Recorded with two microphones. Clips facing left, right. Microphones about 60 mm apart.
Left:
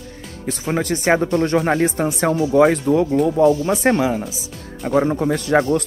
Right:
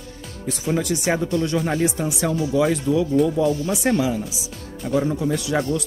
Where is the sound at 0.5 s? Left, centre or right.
Left.